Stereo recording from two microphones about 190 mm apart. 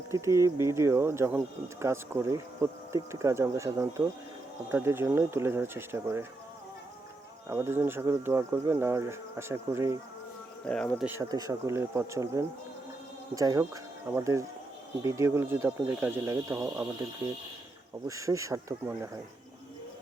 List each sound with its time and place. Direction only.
0.1 s speech: 15° right (ahead or behind)
7.4 s speech: 10° right (ahead or behind)
10.7 s insect: 5° left (ahead or behind)
11.0 s speech: 10° right (ahead or behind)